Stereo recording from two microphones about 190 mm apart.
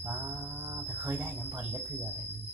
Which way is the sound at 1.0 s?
10° right (ahead or behind).